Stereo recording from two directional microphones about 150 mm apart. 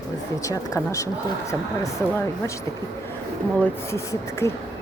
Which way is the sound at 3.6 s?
20° left (ahead or behind).